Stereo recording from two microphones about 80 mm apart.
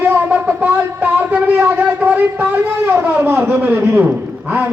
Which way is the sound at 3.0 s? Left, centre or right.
Right.